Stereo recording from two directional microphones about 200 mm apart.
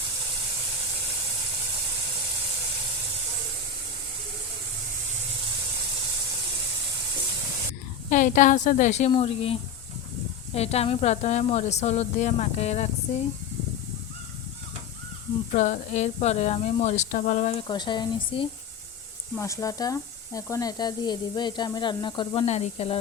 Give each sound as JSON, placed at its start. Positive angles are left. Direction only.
{"t": 8.1, "sound": "a woman's voice", "side_deg": 40}
{"t": 15.5, "sound": "a woman's voice", "side_deg": 40}
{"t": 17.7, "sound": "speech", "side_deg": 20}
{"t": 22.4, "sound": "a woman's voice", "side_deg": 35}